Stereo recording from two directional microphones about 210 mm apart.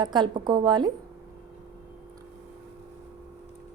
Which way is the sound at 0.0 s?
20° right (ahead or behind).